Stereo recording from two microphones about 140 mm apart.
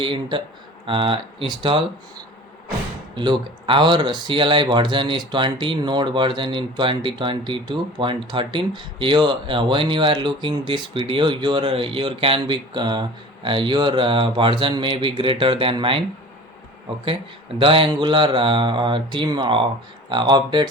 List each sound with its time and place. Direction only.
0.0 s speech: 35° right (ahead or behind)
3.7 s speech: 35° right (ahead or behind)
17.6 s speech: 40° right (ahead or behind)